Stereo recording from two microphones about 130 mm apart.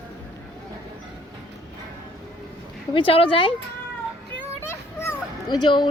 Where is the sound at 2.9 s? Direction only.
45° left (ahead or behind).